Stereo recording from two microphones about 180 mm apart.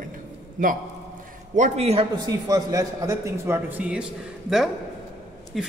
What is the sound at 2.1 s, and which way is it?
A man's voice, 20° right (ahead or behind).